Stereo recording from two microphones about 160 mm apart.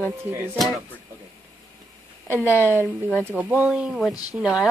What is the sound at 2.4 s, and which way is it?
Speech, 15° left (ahead or behind).